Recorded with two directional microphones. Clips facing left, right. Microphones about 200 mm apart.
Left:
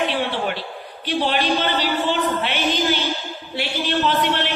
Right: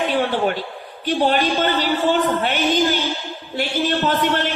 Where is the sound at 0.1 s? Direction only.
45° right (ahead or behind).